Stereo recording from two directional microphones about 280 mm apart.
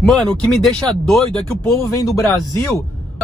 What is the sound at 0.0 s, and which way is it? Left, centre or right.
Speech, centre.